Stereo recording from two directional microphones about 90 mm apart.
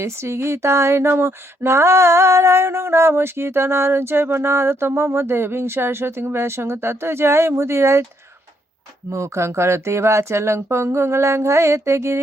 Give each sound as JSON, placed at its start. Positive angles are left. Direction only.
{"t": 0.0, "sound": "speech", "side_deg": -30}
{"t": 9.0, "sound": "speech", "side_deg": -30}